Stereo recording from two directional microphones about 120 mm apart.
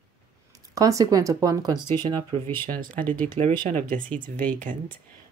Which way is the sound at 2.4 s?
15° left (ahead or behind).